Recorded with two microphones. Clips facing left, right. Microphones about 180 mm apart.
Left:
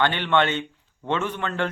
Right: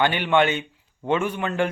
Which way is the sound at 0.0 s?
10° right (ahead or behind).